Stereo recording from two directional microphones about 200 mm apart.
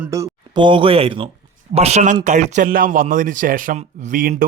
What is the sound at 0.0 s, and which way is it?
A man's voice, 15° right (ahead or behind).